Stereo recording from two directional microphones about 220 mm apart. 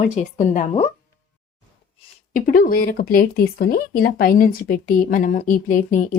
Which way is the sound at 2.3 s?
40° left (ahead or behind).